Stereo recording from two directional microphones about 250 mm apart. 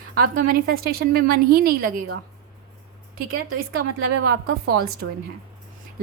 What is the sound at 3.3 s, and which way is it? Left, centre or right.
A woman's voice, right.